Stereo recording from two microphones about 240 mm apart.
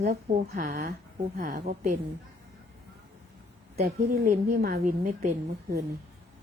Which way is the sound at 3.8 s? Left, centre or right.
Right.